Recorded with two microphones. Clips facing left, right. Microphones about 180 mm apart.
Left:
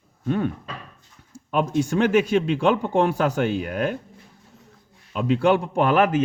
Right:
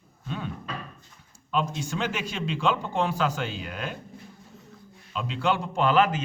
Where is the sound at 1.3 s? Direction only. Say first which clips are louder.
Left 6 dB; 55° left (ahead or behind).